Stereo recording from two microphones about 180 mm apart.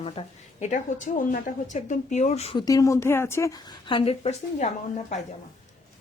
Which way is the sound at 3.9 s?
30° left (ahead or behind).